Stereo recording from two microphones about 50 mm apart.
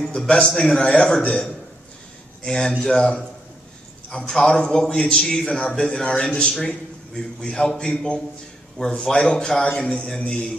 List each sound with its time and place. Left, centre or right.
0.0 s a man's voice: centre
4.4 s a man's voice: centre
9.8 s music: centre